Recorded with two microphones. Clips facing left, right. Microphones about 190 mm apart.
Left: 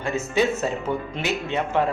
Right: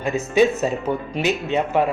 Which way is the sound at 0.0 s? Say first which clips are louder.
Right 5 dB; 15° right (ahead or behind).